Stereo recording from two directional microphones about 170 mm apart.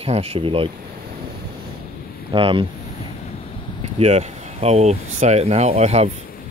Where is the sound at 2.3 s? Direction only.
30° right (ahead or behind).